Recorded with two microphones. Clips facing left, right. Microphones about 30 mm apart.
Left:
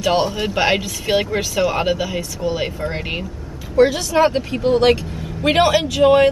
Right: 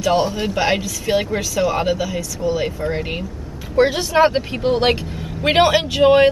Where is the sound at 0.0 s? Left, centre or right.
Left.